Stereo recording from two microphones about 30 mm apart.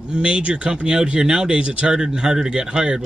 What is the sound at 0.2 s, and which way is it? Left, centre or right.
Speech, right.